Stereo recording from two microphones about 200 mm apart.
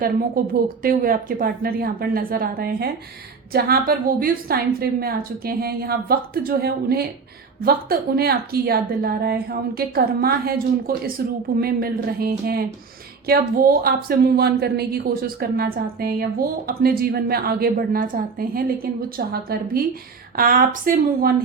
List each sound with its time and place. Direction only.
0.0 s speech: 45° right (ahead or behind)
13.8 s speech: 50° right (ahead or behind)